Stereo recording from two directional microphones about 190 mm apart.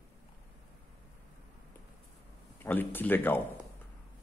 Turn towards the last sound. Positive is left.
turn(degrees=10)  # may be behind; listen again after turning